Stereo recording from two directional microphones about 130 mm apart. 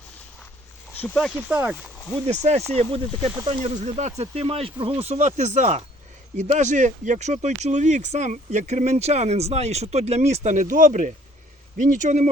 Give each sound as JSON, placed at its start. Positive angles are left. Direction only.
{"t": 0.9, "sound": "speech", "side_deg": 10}
{"t": 1.5, "sound": "speech", "side_deg": -15}
{"t": 2.2, "sound": "speech", "side_deg": -55}
{"t": 3.8, "sound": "speech", "side_deg": -65}